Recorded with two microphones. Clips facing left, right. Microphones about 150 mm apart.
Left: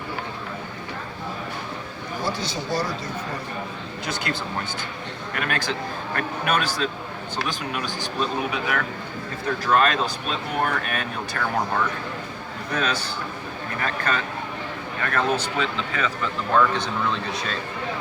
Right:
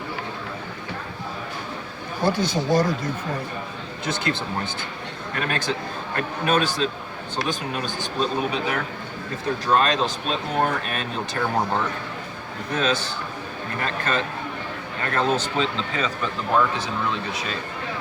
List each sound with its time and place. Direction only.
2.2 s speech: 55° right (ahead or behind)
4.0 s speech: 25° right (ahead or behind)
15.0 s speech: 25° right (ahead or behind)
17.3 s speech: 5° right (ahead or behind)